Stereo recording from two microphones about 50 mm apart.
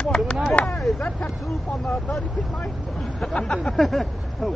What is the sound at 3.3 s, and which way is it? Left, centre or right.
Speech, centre.